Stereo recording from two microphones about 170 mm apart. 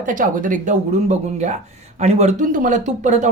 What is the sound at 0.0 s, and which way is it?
Speech, 50° right (ahead or behind).